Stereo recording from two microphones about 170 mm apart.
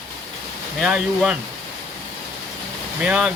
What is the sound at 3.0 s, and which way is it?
Speech, 10° right (ahead or behind).